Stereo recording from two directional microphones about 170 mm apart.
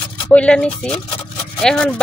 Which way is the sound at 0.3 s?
5° left (ahead or behind).